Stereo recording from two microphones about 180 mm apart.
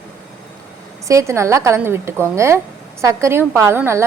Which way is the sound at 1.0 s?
15° right (ahead or behind).